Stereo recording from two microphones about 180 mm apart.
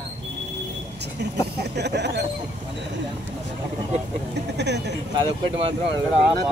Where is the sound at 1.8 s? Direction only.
70° right (ahead or behind).